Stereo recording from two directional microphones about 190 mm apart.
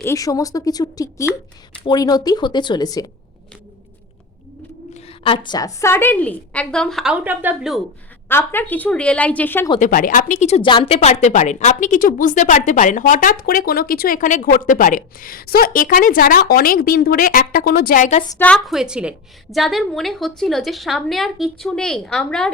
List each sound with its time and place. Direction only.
0.0 s a woman's voice: 15° left (ahead or behind)
4.9 s a woman's voice: 30° left (ahead or behind); by 7.8 s 5° right (ahead or behind)
8.3 s a woman's voice: 10° left (ahead or behind)
9.8 s a woman's voice: 45° left (ahead or behind)
18.3 s a woman's voice: 10° left (ahead or behind)